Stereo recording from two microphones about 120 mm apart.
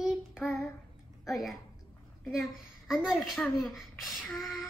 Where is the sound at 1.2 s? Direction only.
Centre (ahead or behind).